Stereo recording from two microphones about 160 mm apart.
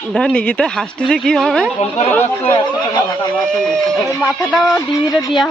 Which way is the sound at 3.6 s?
5° left (ahead or behind).